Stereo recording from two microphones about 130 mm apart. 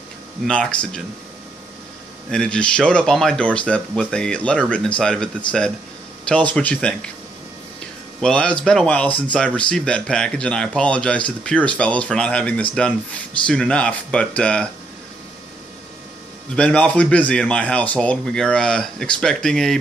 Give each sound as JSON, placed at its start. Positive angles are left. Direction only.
{"t": 0.5, "sound": "speech", "side_deg": 10}
{"t": 2.3, "sound": "speech", "side_deg": 5}
{"t": 16.5, "sound": "speech", "side_deg": 10}